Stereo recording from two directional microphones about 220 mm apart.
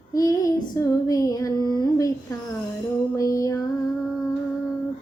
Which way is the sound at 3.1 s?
15° left (ahead or behind).